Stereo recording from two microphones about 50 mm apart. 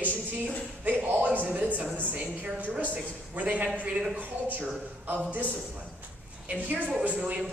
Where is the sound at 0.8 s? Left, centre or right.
Right.